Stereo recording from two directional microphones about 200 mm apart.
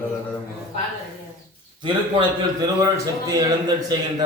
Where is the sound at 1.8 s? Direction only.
25° right (ahead or behind).